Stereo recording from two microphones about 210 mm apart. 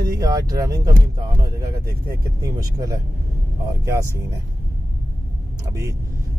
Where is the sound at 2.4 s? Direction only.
15° right (ahead or behind).